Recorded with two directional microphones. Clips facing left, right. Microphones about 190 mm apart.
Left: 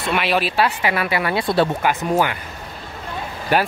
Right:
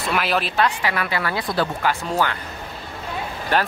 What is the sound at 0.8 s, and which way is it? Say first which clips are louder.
Speech: left 3 dB; 20° left (ahead or behind).